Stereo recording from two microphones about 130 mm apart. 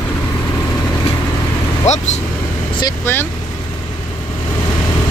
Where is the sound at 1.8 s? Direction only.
60° left (ahead or behind).